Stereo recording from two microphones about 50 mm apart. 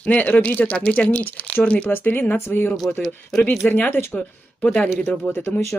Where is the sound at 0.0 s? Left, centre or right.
Left.